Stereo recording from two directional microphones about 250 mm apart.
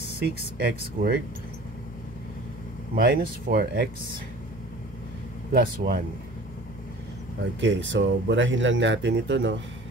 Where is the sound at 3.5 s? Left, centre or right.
Right.